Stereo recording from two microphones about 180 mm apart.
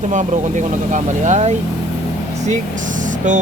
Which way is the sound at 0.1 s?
45° right (ahead or behind).